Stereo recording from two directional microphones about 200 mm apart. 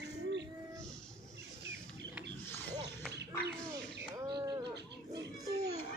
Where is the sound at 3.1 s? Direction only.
55° right (ahead or behind).